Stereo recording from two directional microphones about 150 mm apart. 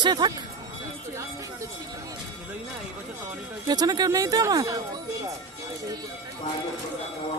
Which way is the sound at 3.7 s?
25° right (ahead or behind).